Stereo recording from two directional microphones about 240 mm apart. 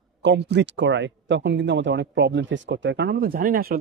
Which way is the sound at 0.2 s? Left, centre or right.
Right.